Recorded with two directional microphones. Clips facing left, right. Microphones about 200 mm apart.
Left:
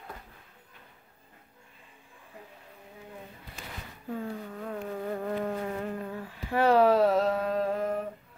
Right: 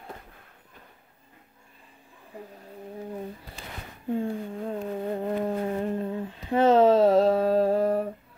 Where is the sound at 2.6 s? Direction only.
40° right (ahead or behind).